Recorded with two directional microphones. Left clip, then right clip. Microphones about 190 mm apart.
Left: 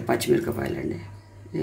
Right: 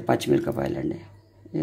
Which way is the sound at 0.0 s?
45° right (ahead or behind).